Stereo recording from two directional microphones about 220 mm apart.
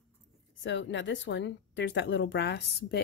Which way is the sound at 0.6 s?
55° left (ahead or behind).